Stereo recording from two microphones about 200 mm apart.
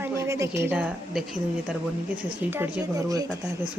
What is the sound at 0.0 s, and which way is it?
A woman's voice, 15° right (ahead or behind).